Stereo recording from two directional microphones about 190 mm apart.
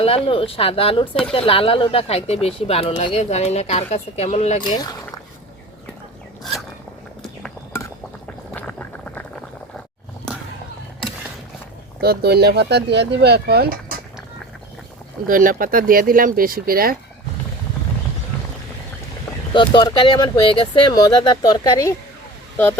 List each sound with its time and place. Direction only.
0.0 s speech: 30° left (ahead or behind)
4.8 s a sound: 20° left (ahead or behind)
8.5 s a sound: 10° left (ahead or behind)
11.9 s speech: 55° right (ahead or behind)
15.3 s speech: 45° right (ahead or behind)
19.5 s speech: 25° left (ahead or behind)